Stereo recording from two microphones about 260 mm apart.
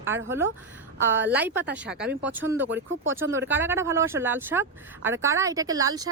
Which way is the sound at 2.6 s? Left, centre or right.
Right.